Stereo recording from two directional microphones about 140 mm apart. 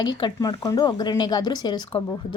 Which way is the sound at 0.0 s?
30° left (ahead or behind).